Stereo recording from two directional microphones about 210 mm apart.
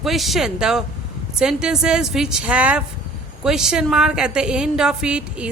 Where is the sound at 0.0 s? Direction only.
Centre (ahead or behind).